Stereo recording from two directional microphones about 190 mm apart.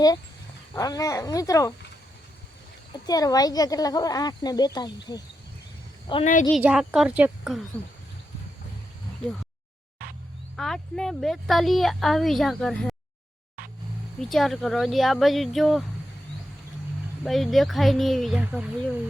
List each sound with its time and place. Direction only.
0.7 s speech: 15° left (ahead or behind)
2.9 s speech: 20° left (ahead or behind)
6.1 s speech: 25° left (ahead or behind)
6.5 s speech: 5° right (ahead or behind)
10.6 s speech: centre (ahead or behind)
14.2 s speech: centre (ahead or behind)
17.2 s speech: centre (ahead or behind)